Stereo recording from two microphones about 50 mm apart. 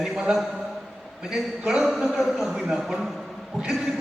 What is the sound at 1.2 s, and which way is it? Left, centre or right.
A man's voice, centre.